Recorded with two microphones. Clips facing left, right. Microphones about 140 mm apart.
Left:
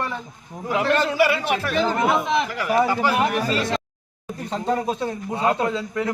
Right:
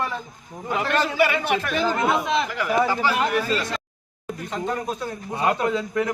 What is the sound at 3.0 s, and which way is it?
Speech, 45° left (ahead or behind).